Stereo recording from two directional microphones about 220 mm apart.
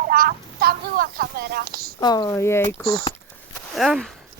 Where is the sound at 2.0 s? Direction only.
20° left (ahead or behind).